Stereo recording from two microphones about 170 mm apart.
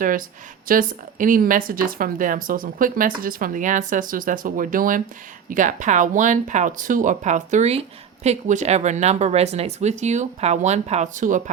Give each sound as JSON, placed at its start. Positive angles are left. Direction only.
{"t": 0.0, "sound": "speech", "side_deg": -55}